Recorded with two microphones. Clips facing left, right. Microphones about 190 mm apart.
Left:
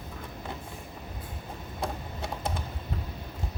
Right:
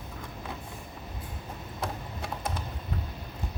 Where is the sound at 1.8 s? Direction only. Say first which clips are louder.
Left 1 dB; 25° left (ahead or behind).